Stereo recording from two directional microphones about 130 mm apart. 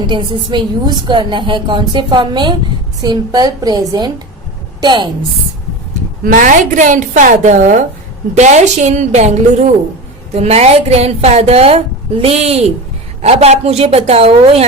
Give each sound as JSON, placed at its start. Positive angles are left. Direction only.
{"t": 0.1, "sound": "a woman's voice", "side_deg": -40}
{"t": 6.2, "sound": "a woman's voice", "side_deg": -90}
{"t": 8.4, "sound": "a woman's voice", "side_deg": -60}